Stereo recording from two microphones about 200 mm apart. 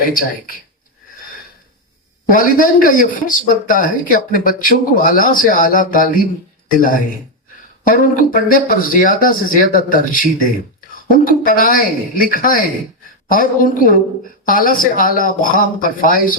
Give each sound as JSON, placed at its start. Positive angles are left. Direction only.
{"t": 0.0, "sound": "speech", "side_deg": 45}
{"t": 2.3, "sound": "speech", "side_deg": 45}